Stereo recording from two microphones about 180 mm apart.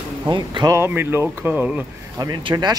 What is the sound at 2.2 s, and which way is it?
Speech, 20° right (ahead or behind).